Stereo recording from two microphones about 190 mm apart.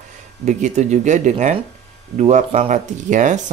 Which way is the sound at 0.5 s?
40° right (ahead or behind).